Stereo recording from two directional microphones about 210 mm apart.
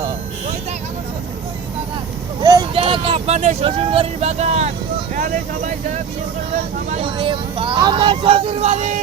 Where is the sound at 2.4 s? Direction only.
20° right (ahead or behind).